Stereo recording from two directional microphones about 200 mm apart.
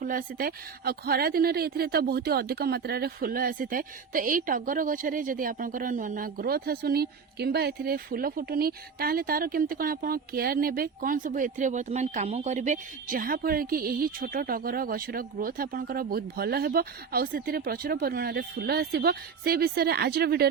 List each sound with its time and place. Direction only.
0.0 s a woman's voice: 45° right (ahead or behind)